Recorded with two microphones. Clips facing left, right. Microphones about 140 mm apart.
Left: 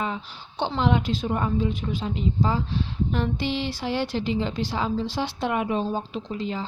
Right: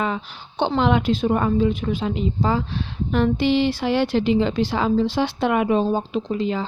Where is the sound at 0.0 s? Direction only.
70° right (ahead or behind).